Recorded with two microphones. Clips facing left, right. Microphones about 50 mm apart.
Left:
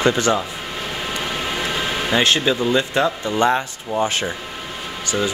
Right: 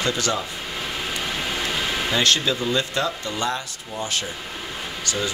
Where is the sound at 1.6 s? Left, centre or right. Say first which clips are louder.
Left 2 dB; centre.